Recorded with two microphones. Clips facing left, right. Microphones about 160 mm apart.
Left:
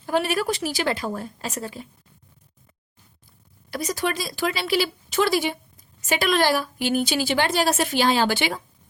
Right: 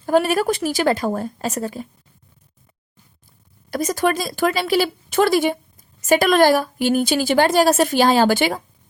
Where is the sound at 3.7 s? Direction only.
45° right (ahead or behind).